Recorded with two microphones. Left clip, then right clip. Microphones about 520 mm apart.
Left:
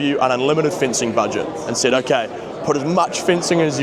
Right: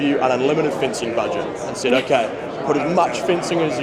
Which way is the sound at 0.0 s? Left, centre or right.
Left.